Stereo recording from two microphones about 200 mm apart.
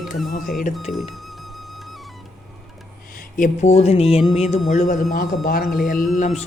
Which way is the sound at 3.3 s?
40° left (ahead or behind).